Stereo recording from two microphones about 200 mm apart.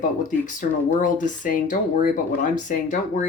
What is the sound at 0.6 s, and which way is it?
Speech, 40° left (ahead or behind).